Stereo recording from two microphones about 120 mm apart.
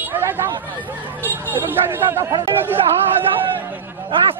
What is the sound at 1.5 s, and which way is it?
Speech, 15° right (ahead or behind).